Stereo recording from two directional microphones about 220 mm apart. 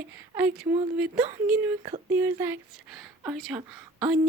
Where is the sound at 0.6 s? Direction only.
20° right (ahead or behind).